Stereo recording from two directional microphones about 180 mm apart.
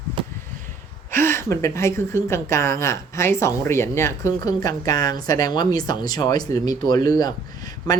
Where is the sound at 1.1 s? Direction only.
15° left (ahead or behind).